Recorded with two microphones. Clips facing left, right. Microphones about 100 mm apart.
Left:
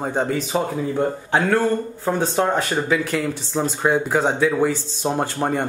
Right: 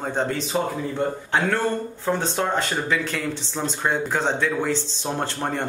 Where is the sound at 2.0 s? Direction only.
15° left (ahead or behind).